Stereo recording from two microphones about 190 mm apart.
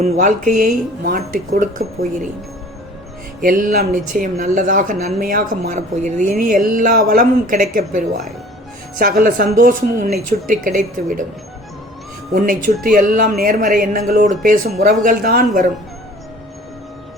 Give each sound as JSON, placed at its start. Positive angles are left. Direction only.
{"t": 0.0, "sound": "speech", "side_deg": -40}
{"t": 3.4, "sound": "speech", "side_deg": -45}
{"t": 12.3, "sound": "speech", "side_deg": -45}